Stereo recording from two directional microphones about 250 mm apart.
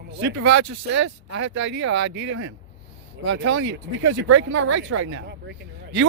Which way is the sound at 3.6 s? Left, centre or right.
Right.